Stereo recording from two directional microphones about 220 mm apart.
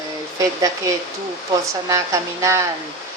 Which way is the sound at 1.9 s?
15° right (ahead or behind).